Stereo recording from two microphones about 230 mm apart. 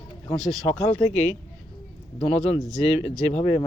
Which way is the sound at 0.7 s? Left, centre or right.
Left.